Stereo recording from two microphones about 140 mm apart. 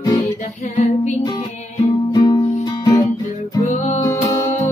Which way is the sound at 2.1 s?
25° left (ahead or behind).